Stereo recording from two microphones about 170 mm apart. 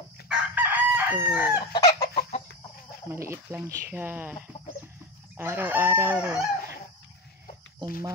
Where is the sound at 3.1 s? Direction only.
15° right (ahead or behind).